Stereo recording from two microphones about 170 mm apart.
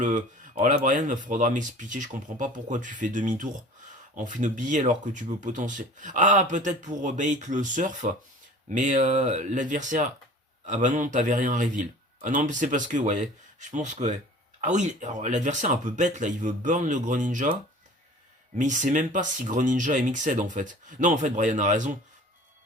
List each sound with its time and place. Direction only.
0.0 s speech: 50° right (ahead or behind)
18.5 s speech: 50° right (ahead or behind)